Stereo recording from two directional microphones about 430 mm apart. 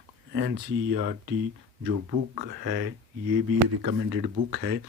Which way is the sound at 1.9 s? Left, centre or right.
Right.